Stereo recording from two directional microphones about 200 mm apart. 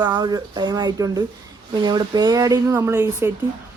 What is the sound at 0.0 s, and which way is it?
Speech, 20° right (ahead or behind).